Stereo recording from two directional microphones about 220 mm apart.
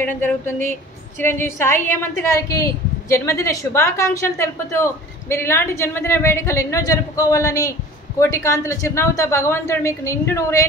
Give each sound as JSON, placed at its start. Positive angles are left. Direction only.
{"t": 0.0, "sound": "a woman's voice", "side_deg": 10}